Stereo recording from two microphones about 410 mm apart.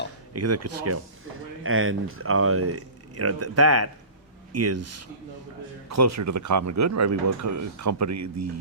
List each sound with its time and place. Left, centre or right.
0.3 s speech: right